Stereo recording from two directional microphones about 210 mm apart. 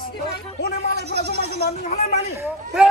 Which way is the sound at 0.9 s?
50° right (ahead or behind).